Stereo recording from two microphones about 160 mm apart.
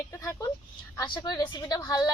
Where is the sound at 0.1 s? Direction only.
20° left (ahead or behind).